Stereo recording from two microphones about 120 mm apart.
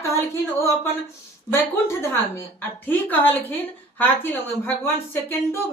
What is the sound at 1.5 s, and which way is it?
A woman's voice, 20° left (ahead or behind).